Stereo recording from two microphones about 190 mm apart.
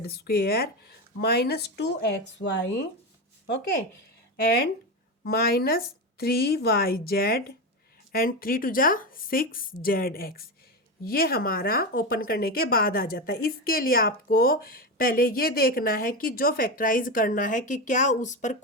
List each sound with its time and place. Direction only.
0.0 s a woman's voice: 55° left (ahead or behind)
3.4 s speech: 65° left (ahead or behind)
5.2 s speech: 50° left (ahead or behind)